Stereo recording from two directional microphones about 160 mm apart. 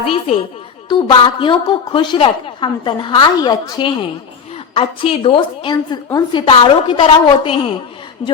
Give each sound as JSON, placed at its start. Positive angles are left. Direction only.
{"t": 0.0, "sound": "a woman's voice", "side_deg": 35}